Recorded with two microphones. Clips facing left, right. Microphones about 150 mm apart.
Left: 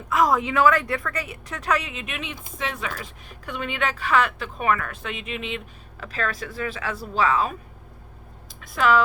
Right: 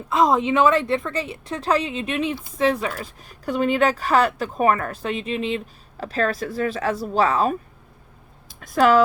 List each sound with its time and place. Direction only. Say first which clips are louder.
0.1 s a woman's voice: right 3 dB; 25° right (ahead or behind); by 7.5 s 40° right (ahead or behind)
8.6 s speech: right 4 dB; 45° right (ahead or behind)